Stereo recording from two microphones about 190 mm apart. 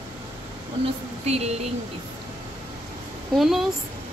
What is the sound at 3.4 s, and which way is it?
Speech, centre (ahead or behind).